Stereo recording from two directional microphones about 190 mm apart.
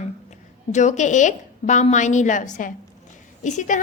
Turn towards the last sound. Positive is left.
turn(degrees=40)  # may be behind; listen again after turning